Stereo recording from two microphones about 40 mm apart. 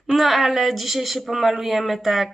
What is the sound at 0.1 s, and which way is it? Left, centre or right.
Speech, centre.